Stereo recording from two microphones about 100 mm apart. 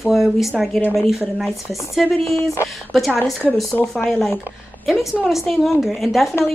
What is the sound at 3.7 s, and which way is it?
A woman's voice, 15° left (ahead or behind).